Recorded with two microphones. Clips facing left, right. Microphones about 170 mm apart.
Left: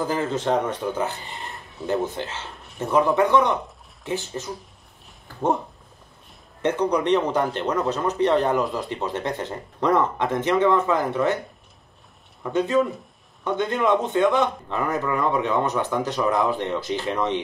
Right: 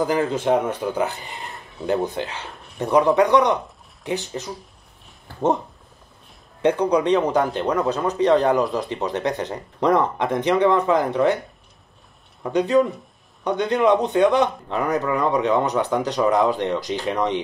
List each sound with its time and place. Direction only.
0.0 s a man's voice: 10° right (ahead or behind)
6.6 s a man's voice: 10° right (ahead or behind)
12.5 s a man's voice: 15° right (ahead or behind)